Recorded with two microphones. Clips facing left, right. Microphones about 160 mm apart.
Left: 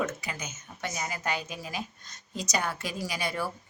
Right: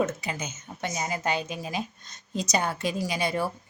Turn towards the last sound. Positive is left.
turn(degrees=-25)  # may be behind; listen again after turning